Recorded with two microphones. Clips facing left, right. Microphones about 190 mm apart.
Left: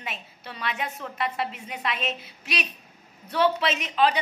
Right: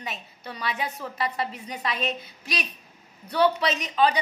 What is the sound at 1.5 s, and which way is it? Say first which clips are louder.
Speech: right 1 dB; 35° right (ahead or behind).